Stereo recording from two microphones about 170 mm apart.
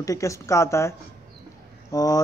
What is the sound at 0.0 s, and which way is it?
A man's voice, 20° left (ahead or behind).